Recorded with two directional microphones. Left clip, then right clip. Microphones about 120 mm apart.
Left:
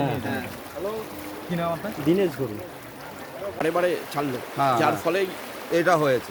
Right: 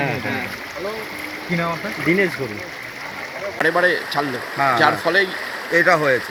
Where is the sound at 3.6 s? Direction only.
Centre (ahead or behind).